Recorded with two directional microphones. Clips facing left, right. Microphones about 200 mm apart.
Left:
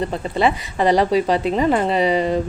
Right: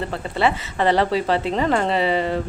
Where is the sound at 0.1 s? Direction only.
15° left (ahead or behind).